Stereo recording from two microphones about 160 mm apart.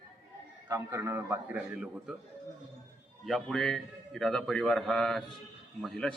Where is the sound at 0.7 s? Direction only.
20° right (ahead or behind).